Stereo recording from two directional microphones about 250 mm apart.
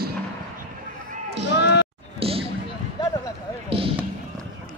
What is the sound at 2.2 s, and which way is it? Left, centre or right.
Basketball bounce, right.